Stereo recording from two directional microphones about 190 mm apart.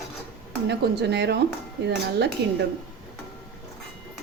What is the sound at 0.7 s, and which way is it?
Speech, 65° right (ahead or behind).